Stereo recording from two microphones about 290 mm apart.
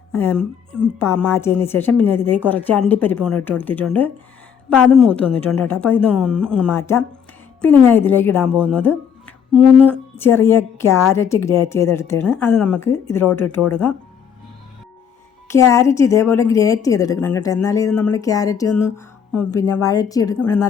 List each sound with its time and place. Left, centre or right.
0.1 s a woman's voice: centre
15.4 s a woman's voice: centre